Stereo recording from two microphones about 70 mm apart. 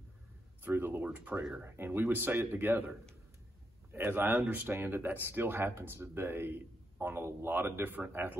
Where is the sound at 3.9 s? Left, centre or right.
Right.